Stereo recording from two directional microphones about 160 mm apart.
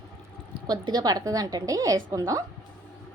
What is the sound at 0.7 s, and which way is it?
A woman's voice, 25° right (ahead or behind).